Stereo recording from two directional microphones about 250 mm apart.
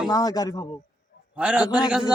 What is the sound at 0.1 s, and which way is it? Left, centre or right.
Speech, centre.